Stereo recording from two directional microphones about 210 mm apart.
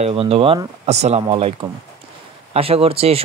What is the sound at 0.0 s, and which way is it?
Speech, 25° right (ahead or behind).